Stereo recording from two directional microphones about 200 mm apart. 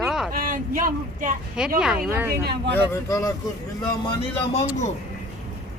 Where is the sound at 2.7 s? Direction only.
15° left (ahead or behind).